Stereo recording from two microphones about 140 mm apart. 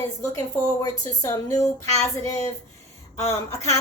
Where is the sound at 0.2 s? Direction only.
20° left (ahead or behind).